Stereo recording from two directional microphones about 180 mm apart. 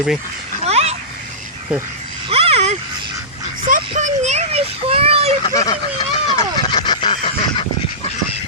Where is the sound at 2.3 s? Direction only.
35° right (ahead or behind).